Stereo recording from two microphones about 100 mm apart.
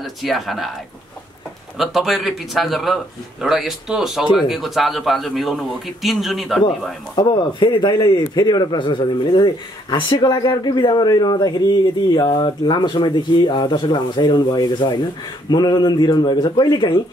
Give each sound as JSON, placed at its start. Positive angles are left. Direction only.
{"t": 0.0, "sound": "a man's voice", "side_deg": 0}
{"t": 1.8, "sound": "a man's voice", "side_deg": 0}
{"t": 7.2, "sound": "speech", "side_deg": 50}